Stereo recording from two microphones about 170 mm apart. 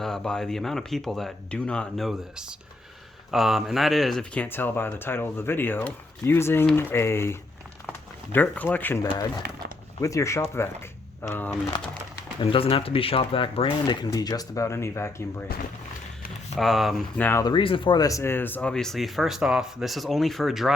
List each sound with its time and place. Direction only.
0.0 s speech: 5° left (ahead or behind)
10.0 s speech: 20° left (ahead or behind)
11.7 s speech: 25° left (ahead or behind)
16.6 s speech: centre (ahead or behind)
17.2 s speech: 15° left (ahead or behind)
17.5 s speech: 30° left (ahead or behind); by 20.7 s centre (ahead or behind)